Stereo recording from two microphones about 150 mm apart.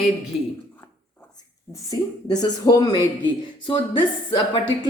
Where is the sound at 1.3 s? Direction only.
25° left (ahead or behind).